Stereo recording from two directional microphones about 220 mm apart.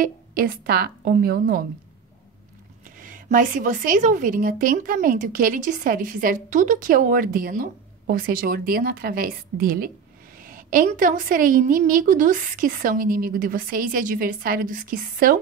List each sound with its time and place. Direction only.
0.0 s a woman's voice: 40° right (ahead or behind)
3.0 s a woman's voice: 35° right (ahead or behind)